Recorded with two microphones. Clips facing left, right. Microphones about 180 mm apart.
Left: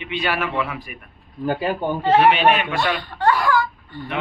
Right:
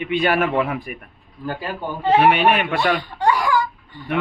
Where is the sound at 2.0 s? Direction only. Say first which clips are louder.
Right 1 dB; 10° right (ahead or behind).